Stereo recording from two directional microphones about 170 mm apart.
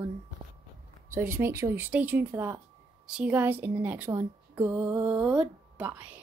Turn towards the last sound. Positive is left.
turn(degrees=-10)  # may be behind; listen again after turning